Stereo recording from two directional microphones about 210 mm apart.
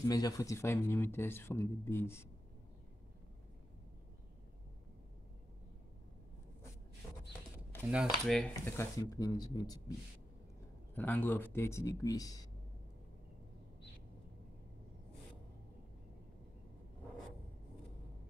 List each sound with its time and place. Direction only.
0.0 s speech: 15° left (ahead or behind)
7.9 s speech: centre (ahead or behind); by 9.9 s 20° left (ahead or behind)
11.0 s speech: 10° left (ahead or behind)